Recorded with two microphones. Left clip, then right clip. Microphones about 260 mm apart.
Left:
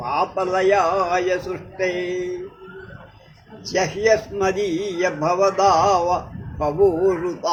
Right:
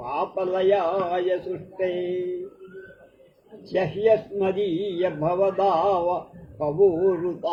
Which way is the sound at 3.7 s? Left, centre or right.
Left.